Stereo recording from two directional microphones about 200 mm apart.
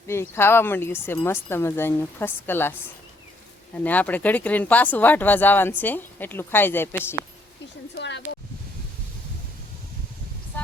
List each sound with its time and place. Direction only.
0.1 s speech: 10° left (ahead or behind)
3.8 s speech: 10° left (ahead or behind)
7.9 s speech: 60° left (ahead or behind)